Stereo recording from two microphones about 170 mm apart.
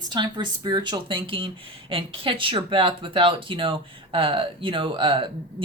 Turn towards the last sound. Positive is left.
turn(degrees=-30)  # may be behind; listen again after turning